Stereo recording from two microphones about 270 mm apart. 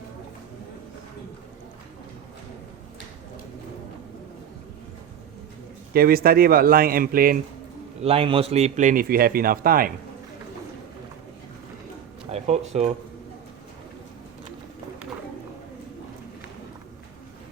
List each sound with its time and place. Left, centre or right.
5.9 s speech: right
8.0 s a man's voice: right
12.3 s speech: right